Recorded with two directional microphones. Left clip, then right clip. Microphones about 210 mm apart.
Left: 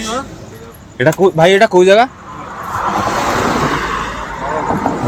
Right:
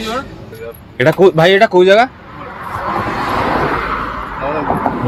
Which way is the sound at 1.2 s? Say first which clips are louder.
Right 4 dB; 20° right (ahead or behind).